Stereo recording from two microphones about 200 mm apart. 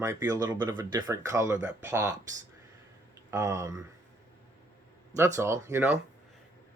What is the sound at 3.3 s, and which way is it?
Speech, 15° right (ahead or behind).